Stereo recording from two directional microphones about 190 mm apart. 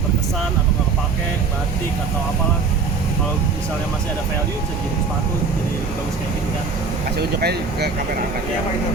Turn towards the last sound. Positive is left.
turn(degrees=-55)  # may be behind; listen again after turning